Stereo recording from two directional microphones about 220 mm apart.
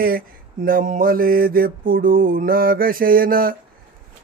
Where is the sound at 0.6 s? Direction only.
40° right (ahead or behind).